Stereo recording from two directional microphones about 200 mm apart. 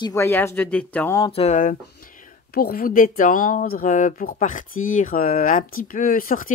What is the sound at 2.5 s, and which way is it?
Speech, 50° left (ahead or behind).